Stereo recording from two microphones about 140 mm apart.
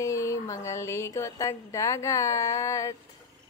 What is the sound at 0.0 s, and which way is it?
A woman's voice, 20° left (ahead or behind).